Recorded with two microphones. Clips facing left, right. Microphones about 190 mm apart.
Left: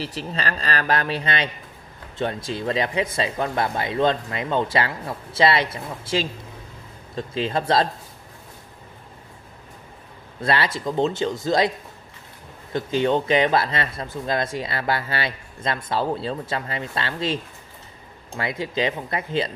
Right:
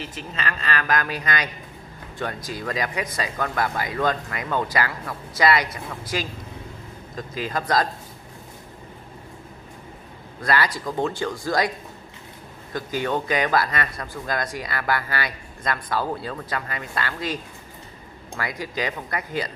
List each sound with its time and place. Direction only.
0.0 s speech: 35° left (ahead or behind)
10.4 s speech: 25° left (ahead or behind)
12.7 s speech: 25° left (ahead or behind)